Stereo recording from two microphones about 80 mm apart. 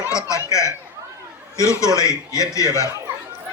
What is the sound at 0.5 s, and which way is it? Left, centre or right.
Chatter, left.